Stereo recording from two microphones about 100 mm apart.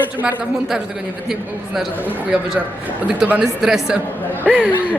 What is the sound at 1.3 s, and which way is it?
Speech, centre (ahead or behind).